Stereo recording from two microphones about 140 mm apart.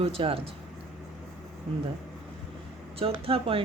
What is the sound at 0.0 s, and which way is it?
Speech, 40° right (ahead or behind).